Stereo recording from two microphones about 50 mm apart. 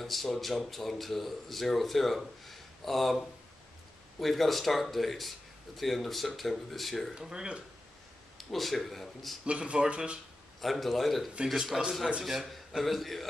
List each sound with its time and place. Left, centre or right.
0.0 s speech: centre
7.2 s speech: centre
8.4 s speech: centre
9.5 s speech: right
10.6 s speech: centre